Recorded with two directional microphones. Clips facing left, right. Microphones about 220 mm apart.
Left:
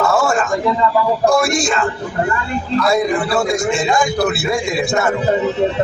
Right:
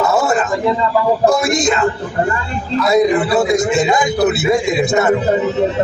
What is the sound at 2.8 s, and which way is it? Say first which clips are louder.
A man's voice: right 6 dB; 20° right (ahead or behind).